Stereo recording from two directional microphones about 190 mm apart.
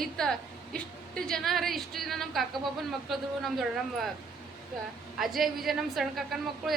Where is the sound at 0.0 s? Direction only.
5° left (ahead or behind).